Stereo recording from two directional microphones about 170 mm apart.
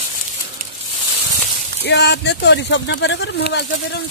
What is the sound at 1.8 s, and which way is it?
Speech, 90° left.